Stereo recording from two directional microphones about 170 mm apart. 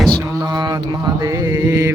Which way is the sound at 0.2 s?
25° right (ahead or behind).